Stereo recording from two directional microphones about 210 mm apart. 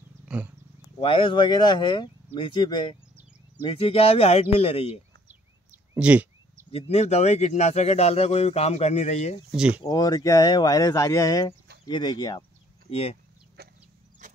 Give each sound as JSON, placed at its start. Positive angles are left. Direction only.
{"t": 0.2, "sound": "wild animals", "side_deg": -5}
{"t": 0.9, "sound": "speech", "side_deg": 25}
{"t": 5.7, "sound": "a sound", "side_deg": -5}
{"t": 6.9, "sound": "speech", "side_deg": 30}
{"t": 9.6, "sound": "speech", "side_deg": -5}
{"t": 9.8, "sound": "speech", "side_deg": 20}
{"t": 13.6, "sound": "chicken", "side_deg": -50}
{"t": 14.2, "sound": "mechanisms", "side_deg": -35}